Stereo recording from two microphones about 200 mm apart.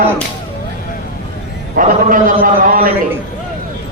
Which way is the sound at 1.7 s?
40° right (ahead or behind).